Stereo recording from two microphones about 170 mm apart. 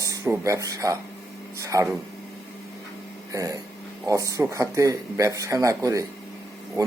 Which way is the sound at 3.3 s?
20° right (ahead or behind).